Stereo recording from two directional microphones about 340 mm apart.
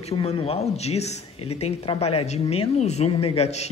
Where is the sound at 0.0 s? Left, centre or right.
Centre.